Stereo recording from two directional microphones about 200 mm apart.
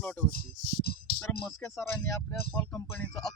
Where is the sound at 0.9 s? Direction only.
50° left (ahead or behind).